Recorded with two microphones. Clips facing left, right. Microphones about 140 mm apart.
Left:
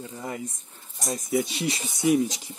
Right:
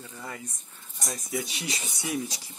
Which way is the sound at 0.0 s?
25° left (ahead or behind).